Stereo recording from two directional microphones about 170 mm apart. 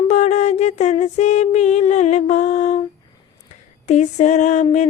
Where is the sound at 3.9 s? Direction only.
40° left (ahead or behind).